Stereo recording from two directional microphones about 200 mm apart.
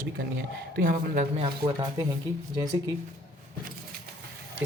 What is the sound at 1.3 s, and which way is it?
Speech, 25° right (ahead or behind).